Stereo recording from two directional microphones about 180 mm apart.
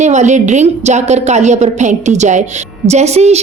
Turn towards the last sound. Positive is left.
turn(degrees=-35)  # may be behind; listen again after turning